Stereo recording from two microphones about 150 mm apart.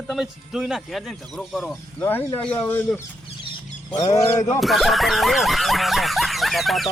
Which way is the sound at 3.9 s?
25° left (ahead or behind).